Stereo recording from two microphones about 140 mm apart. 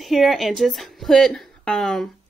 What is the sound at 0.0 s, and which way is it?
Speech, centre (ahead or behind).